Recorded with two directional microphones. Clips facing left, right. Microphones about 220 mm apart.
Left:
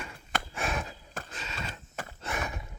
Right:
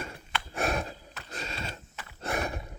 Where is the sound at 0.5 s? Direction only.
40° right (ahead or behind).